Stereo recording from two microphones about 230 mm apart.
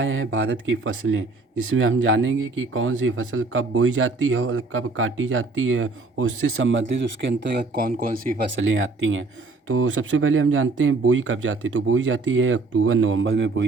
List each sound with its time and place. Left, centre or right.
0.0 s speech: right
8.5 s speech: right